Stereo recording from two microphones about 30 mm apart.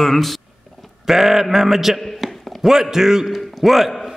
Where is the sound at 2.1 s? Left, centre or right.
Centre.